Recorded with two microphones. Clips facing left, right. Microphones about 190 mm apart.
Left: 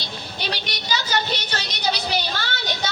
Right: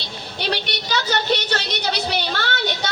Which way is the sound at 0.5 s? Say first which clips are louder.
Right 5 dB; 65° right (ahead or behind).